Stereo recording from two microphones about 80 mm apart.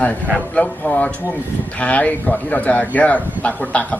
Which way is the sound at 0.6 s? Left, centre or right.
Centre.